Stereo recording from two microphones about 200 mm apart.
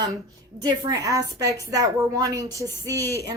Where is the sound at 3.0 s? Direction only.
15° left (ahead or behind).